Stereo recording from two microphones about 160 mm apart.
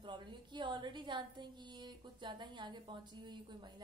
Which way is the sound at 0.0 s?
30° right (ahead or behind).